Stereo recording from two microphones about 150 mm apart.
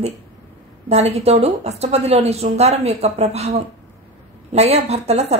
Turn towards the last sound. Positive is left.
turn(degrees=-45)  # may be behind; listen again after turning